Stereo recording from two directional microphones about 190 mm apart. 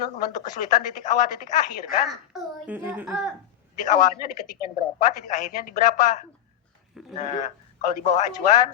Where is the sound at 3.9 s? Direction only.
40° left (ahead or behind).